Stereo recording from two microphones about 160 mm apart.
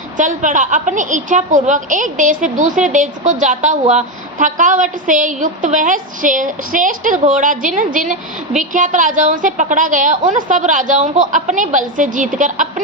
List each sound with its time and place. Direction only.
0.2 s a woman's voice: 50° right (ahead or behind)